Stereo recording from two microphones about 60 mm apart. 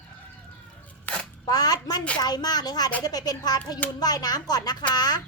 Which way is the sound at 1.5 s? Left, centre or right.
Left.